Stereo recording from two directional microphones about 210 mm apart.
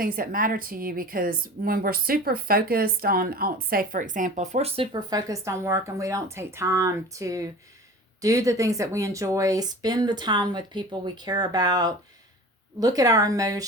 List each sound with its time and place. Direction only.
0.0 s a woman's voice: 45° right (ahead or behind); by 13.7 s 15° right (ahead or behind)